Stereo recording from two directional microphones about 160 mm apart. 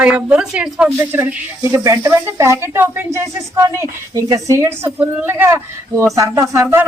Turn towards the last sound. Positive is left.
turn(degrees=-15)  # may be behind; listen again after turning